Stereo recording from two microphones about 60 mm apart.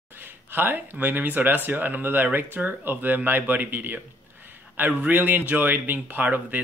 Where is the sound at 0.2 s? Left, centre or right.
Right.